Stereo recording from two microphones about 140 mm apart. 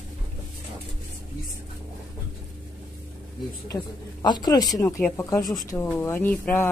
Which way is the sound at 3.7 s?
30° left (ahead or behind).